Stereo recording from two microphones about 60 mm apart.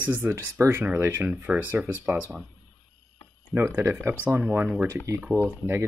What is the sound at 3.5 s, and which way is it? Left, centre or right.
Speech, right.